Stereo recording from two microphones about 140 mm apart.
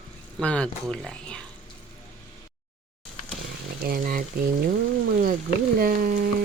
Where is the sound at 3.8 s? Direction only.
90° right.